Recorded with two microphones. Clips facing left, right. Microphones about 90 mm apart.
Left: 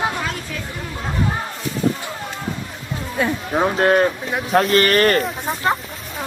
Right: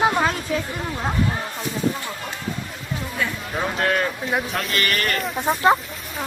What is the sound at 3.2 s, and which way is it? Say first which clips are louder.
Speech: left 8 dB; 35° left (ahead or behind).